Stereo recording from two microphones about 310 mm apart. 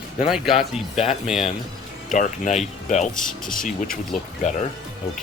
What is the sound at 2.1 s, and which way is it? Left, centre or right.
Speech, left.